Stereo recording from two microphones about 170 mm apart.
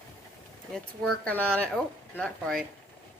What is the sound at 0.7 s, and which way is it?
A woman's voice, 5° left (ahead or behind).